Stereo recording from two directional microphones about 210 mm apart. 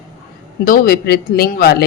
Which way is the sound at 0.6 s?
45° left (ahead or behind).